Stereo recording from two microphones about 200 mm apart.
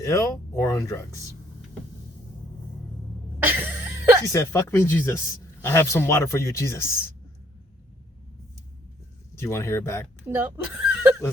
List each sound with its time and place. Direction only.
0.0 s speech: 15° left (ahead or behind)
3.4 s a sound: 10° right (ahead or behind)
4.3 s speech: 15° left (ahead or behind)
9.3 s speech: 15° left (ahead or behind)
10.3 s speech: 10° right (ahead or behind)